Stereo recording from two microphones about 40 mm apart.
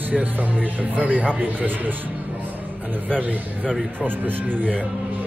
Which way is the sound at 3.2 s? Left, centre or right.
Right.